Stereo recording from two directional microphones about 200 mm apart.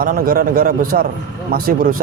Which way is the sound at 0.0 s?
45° right (ahead or behind).